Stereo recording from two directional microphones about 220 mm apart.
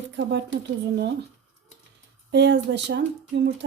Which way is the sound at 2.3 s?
50° right (ahead or behind).